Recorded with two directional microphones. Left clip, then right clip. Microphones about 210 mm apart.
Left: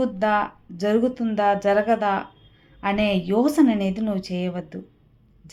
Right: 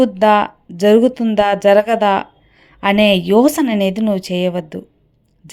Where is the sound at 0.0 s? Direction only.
35° right (ahead or behind).